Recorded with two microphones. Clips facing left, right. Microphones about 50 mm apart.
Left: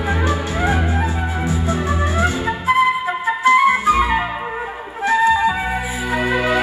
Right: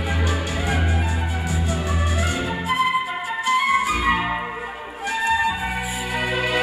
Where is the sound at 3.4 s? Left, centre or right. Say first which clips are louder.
Left 6 dB; left.